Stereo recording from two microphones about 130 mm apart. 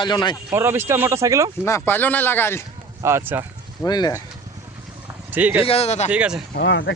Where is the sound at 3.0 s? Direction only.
15° right (ahead or behind).